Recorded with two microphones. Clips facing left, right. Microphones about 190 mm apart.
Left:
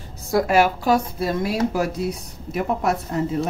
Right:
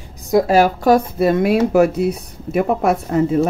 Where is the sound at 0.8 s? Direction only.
55° right (ahead or behind).